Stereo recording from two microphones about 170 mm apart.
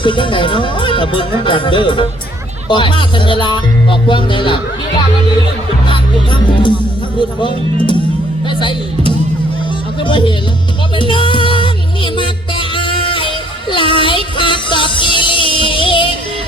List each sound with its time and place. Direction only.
0.0 s speech: 30° left (ahead or behind)
7.2 s speech: 30° left (ahead or behind)
10.0 s speech: 30° left (ahead or behind)
10.9 s music: 30° left (ahead or behind)